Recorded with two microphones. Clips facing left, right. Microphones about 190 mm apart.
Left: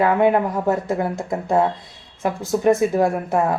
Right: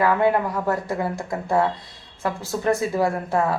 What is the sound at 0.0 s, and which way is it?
A woman's voice, 20° left (ahead or behind).